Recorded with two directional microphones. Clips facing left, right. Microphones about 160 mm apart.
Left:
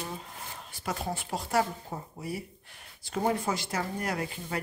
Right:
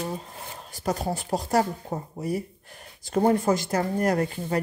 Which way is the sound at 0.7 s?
40° right (ahead or behind).